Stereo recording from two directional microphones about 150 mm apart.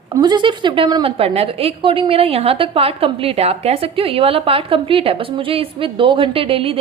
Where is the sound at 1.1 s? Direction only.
40° right (ahead or behind).